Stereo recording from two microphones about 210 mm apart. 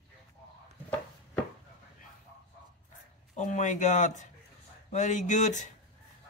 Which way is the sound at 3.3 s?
35° left (ahead or behind).